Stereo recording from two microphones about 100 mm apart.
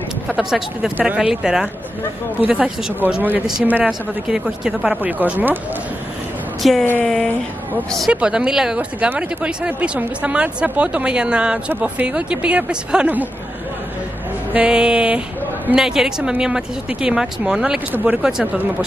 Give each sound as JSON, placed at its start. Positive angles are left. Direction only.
{"t": 0.4, "sound": "speech", "side_deg": -5}
{"t": 4.3, "sound": "speech", "side_deg": -5}
{"t": 5.0, "sound": "speech", "side_deg": -20}
{"t": 6.6, "sound": "speech", "side_deg": 0}
{"t": 8.1, "sound": "speech", "side_deg": -10}
{"t": 14.5, "sound": "speech", "side_deg": -10}